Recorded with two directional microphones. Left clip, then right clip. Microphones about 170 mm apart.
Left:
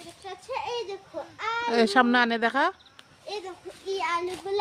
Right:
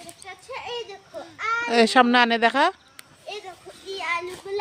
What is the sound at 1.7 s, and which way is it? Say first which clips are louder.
Speech: right 4 dB; 15° right (ahead or behind).